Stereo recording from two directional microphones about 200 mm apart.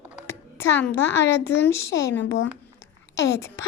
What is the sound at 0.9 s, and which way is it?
Speech, 60° left (ahead or behind).